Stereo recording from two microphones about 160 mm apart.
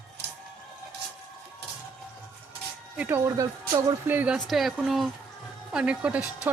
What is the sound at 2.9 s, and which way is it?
A woman's voice, 15° right (ahead or behind).